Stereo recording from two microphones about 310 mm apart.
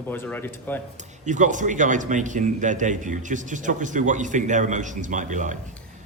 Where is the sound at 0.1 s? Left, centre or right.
Centre.